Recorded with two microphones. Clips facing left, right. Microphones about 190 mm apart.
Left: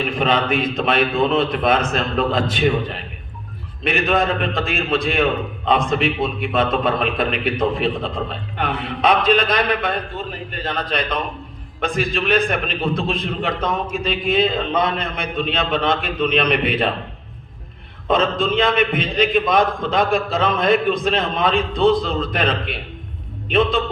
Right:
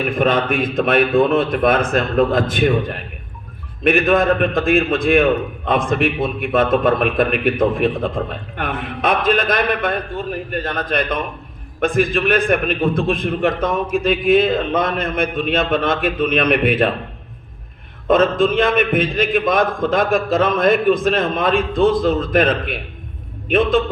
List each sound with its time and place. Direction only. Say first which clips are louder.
0.0 s a man's voice: right 2 dB; 50° right (ahead or behind)
18.1 s a man's voice: right 4 dB; 50° right (ahead or behind)